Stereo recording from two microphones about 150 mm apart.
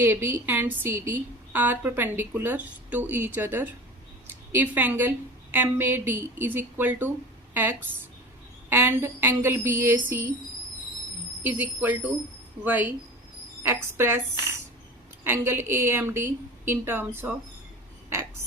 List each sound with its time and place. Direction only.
0.0 s a woman's voice: 15° right (ahead or behind)
11.4 s a woman's voice: 10° right (ahead or behind)
15.2 s a woman's voice: 15° right (ahead or behind)